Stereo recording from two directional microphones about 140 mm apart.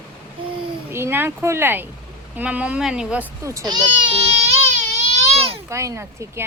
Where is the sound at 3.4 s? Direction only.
25° right (ahead or behind); by 5.6 s 45° right (ahead or behind).